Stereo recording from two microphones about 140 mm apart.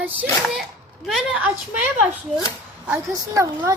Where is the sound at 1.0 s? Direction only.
5° right (ahead or behind).